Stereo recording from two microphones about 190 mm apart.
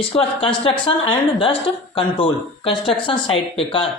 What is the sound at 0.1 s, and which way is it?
Speech, 30° left (ahead or behind).